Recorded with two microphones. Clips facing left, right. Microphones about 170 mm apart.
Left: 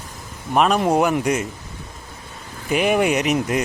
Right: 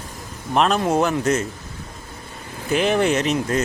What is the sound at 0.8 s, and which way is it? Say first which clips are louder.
Speech: left 2 dB; 15° left (ahead or behind).